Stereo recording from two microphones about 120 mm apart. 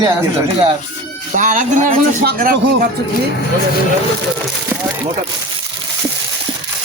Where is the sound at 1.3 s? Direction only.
90° right.